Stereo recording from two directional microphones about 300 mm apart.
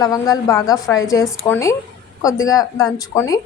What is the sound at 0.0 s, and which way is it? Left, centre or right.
A woman's voice, centre.